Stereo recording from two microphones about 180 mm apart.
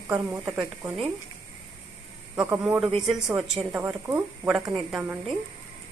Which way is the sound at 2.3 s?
5° right (ahead or behind).